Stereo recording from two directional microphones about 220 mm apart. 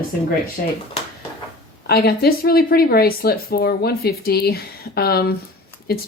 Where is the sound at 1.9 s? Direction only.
45° left (ahead or behind).